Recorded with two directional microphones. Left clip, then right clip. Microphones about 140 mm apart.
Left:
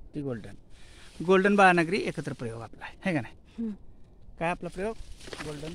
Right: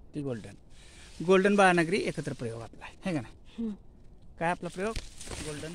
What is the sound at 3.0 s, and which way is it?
Speech, 65° left (ahead or behind).